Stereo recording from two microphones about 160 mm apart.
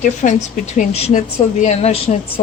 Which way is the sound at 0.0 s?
50° left (ahead or behind).